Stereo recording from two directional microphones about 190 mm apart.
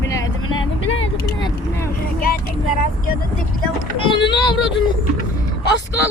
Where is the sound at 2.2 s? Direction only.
50° left (ahead or behind).